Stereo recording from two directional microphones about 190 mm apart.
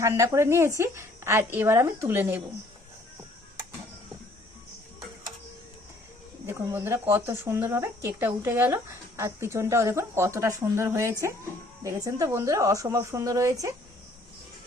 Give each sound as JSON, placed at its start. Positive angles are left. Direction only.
{"t": 0.0, "sound": "speech", "side_deg": -15}
{"t": 6.4, "sound": "speech", "side_deg": -10}